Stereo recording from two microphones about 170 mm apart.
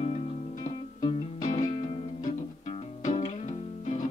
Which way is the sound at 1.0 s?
45° left (ahead or behind).